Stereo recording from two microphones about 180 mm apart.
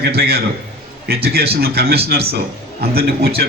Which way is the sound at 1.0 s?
60° right (ahead or behind).